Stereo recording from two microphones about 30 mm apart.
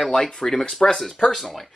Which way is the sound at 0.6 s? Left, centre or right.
Left.